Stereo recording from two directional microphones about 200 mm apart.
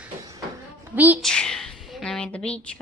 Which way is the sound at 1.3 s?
5° left (ahead or behind).